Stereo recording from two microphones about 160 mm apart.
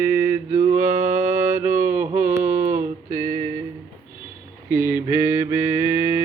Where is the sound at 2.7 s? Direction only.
20° right (ahead or behind).